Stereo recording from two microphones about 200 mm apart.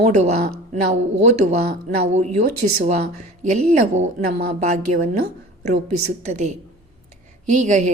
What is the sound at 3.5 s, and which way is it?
A woman's voice, 35° right (ahead or behind).